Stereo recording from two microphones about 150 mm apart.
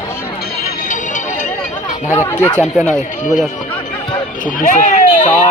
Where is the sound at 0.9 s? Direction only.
55° left (ahead or behind).